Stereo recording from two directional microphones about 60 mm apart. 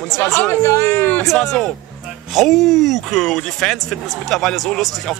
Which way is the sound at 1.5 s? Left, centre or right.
Centre.